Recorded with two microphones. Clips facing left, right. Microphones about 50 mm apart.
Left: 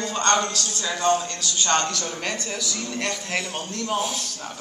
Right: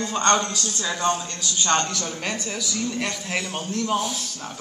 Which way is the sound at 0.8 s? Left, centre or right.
Centre.